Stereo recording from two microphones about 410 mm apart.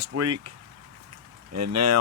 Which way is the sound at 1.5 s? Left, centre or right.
Right.